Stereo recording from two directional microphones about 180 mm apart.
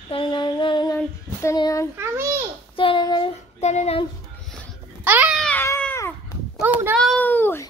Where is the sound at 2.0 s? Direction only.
15° right (ahead or behind).